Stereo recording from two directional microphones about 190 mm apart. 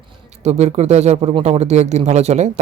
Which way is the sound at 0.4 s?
35° right (ahead or behind).